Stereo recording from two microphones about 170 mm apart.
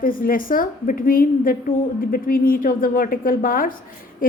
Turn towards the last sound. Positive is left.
turn(degrees=55)  # may be behind; listen again after turning